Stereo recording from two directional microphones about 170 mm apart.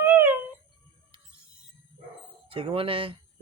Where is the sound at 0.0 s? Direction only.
10° right (ahead or behind).